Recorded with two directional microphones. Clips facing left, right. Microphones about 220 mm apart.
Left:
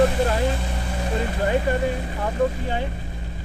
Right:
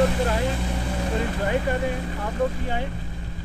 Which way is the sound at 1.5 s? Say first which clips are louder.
Left 4 dB; 30° left (ahead or behind).